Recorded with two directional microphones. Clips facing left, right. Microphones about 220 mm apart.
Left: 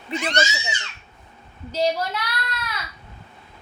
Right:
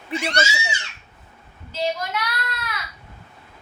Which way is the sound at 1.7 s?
40° left (ahead or behind).